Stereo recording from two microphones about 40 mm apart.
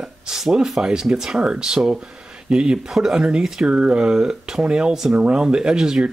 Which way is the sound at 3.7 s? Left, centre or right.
Right.